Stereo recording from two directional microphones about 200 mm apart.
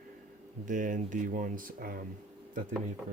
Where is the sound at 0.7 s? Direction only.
40° right (ahead or behind).